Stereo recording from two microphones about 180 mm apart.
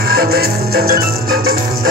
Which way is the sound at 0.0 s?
60° right (ahead or behind).